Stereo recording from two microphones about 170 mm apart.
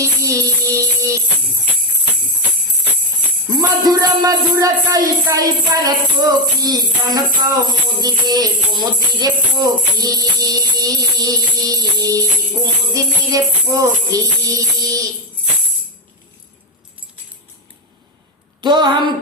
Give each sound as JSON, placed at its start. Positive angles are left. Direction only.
{"t": 0.0, "sound": "music", "side_deg": -20}
{"t": 3.6, "sound": "speech", "side_deg": -25}
{"t": 18.6, "sound": "speech", "side_deg": -25}